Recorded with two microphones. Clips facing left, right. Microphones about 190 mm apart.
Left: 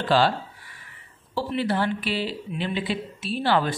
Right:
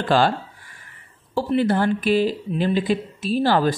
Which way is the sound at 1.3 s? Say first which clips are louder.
Right 6 dB; 45° right (ahead or behind).